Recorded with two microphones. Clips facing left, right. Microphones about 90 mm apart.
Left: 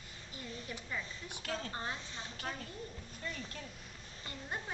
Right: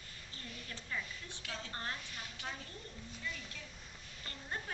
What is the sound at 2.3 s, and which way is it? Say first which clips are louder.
Speech: left 5 dB; 45° left (ahead or behind).